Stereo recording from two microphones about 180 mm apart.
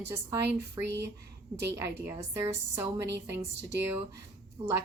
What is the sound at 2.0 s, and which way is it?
A woman's voice, 15° right (ahead or behind).